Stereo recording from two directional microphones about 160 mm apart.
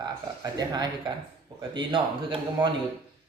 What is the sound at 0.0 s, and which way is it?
A man's voice, 25° right (ahead or behind).